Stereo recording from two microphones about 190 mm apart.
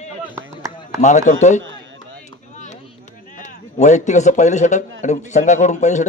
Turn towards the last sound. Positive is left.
turn(degrees=40)  # may be behind; listen again after turning